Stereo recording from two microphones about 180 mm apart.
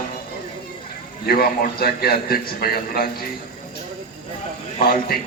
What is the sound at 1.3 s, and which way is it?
A man's voice, 55° left (ahead or behind).